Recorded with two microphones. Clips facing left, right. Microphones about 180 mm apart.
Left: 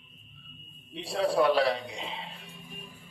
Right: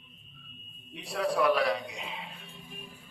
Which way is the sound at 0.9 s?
30° left (ahead or behind).